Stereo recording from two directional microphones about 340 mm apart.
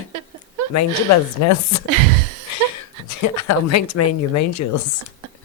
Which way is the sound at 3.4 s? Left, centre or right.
Left.